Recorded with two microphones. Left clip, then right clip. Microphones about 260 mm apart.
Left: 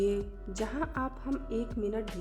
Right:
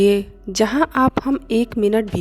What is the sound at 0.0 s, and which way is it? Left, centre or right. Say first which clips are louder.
Speech: right 15 dB; right.